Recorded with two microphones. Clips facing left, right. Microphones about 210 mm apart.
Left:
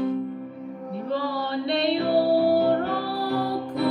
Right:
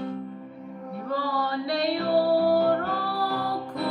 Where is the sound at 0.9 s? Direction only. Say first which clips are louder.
Left 1 dB; 25° left (ahead or behind).